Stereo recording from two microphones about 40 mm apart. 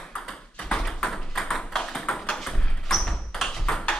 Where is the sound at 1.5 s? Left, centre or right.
Centre.